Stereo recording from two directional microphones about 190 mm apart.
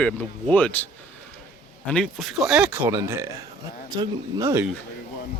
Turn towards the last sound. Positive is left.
turn(degrees=-15)  # may be behind; listen again after turning